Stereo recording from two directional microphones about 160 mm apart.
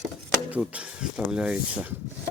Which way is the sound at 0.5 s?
5° right (ahead or behind).